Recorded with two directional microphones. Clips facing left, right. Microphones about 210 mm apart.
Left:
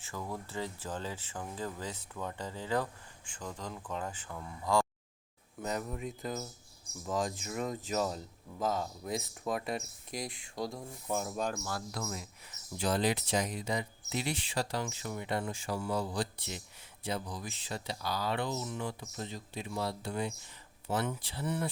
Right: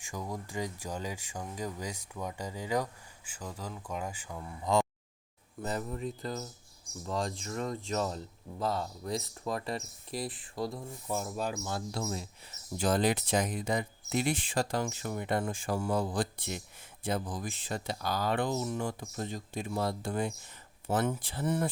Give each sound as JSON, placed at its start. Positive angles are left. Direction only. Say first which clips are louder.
{"t": 0.0, "sound": "speech", "louder": "right 1 dB", "side_deg": -15}
{"t": 4.6, "sound": "a sound", "louder": "right 2 dB", "side_deg": -20}
{"t": 5.6, "sound": "speech", "louder": "right 1 dB", "side_deg": 0}
{"t": 11.6, "sound": "speech", "louder": "right 3 dB", "side_deg": -25}
{"t": 12.7, "sound": "speech", "louder": "right 3 dB", "side_deg": -45}